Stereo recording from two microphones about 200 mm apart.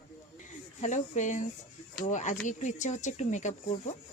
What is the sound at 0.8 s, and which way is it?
Speech, 35° left (ahead or behind).